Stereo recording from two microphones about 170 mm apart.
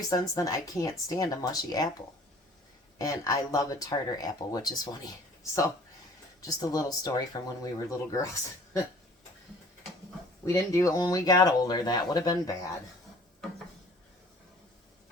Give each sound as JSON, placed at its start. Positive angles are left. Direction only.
{"t": 0.1, "sound": "speech", "side_deg": 20}
{"t": 3.0, "sound": "speech", "side_deg": 20}
{"t": 6.4, "sound": "speech", "side_deg": 20}
{"t": 10.4, "sound": "speech", "side_deg": 20}